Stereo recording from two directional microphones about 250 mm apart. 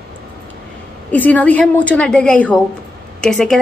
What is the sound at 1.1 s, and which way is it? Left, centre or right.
A woman's voice, centre.